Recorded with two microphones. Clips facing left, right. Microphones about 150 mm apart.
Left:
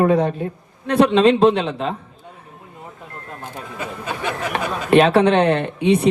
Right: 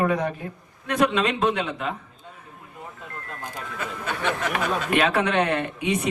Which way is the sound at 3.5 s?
15° left (ahead or behind).